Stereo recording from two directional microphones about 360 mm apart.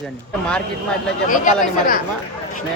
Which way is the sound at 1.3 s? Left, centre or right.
Left.